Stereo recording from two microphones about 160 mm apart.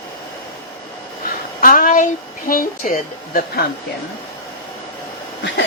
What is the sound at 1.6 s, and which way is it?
Speech, 60° left (ahead or behind).